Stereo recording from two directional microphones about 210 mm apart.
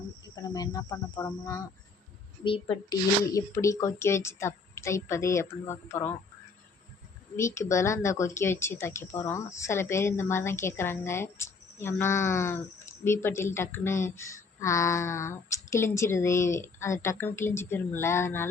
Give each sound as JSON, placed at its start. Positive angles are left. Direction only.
{"t": 0.3, "sound": "speech", "side_deg": 15}
{"t": 7.3, "sound": "speech", "side_deg": 15}